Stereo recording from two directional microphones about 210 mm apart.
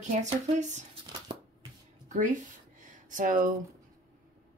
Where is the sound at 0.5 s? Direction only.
35° right (ahead or behind).